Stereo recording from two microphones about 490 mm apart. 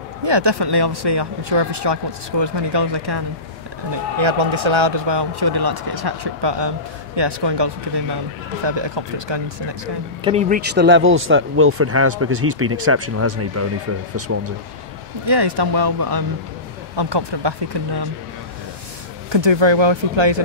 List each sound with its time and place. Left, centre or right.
0.2 s speech: right
4.2 s speech: right
10.2 s speech: centre
15.2 s speech: right
16.9 s speech: right
19.3 s speech: right